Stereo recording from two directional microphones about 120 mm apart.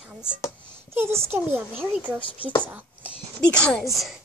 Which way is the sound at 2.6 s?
15° right (ahead or behind).